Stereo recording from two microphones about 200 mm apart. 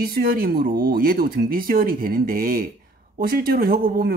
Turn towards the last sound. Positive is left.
turn(degrees=-45)  # may be behind; listen again after turning